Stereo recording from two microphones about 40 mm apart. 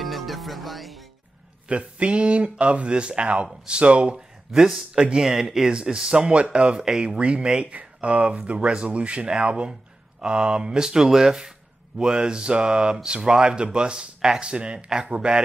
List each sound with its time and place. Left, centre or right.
0.0 s music: centre
1.7 s speech: right
6.9 s speech: centre
7.2 s speech: right